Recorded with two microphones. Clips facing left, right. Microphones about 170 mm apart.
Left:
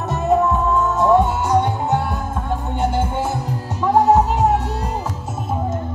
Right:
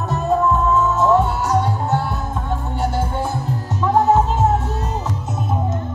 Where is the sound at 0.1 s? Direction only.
15° left (ahead or behind).